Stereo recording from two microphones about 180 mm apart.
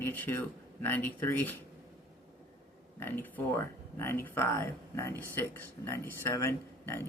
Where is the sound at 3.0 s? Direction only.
10° left (ahead or behind).